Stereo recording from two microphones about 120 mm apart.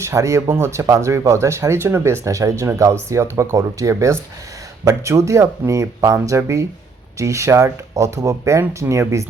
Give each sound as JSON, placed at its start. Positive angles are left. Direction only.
{"t": 0.0, "sound": "speech", "side_deg": -25}